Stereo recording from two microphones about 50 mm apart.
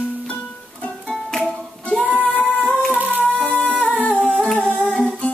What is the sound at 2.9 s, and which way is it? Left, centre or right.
Music, right.